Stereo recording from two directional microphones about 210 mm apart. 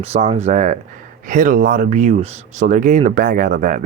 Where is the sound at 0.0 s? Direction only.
30° right (ahead or behind).